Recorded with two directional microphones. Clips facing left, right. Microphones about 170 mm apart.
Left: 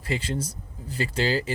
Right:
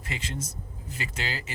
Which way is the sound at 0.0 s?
30° left (ahead or behind).